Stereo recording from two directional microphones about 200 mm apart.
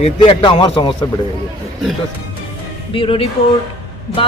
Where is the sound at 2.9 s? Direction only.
25° left (ahead or behind).